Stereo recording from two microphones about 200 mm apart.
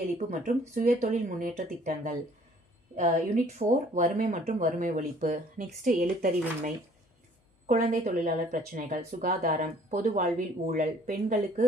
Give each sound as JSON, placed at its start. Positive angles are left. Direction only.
{"t": 0.3, "sound": "speech", "side_deg": -40}